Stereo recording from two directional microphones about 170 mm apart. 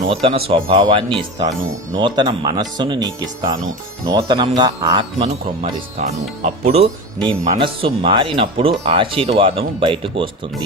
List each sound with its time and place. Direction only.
0.1 s speech: 35° right (ahead or behind)
6.1 s speech: 40° right (ahead or behind)